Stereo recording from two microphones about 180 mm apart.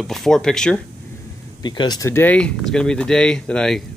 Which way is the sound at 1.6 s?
25° left (ahead or behind).